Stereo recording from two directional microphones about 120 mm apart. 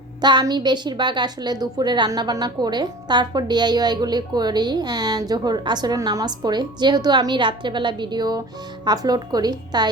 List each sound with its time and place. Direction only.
0.2 s a woman's voice: 40° right (ahead or behind)